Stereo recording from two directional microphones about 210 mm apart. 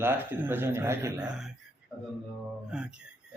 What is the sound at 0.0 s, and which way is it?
A man's voice, 10° right (ahead or behind).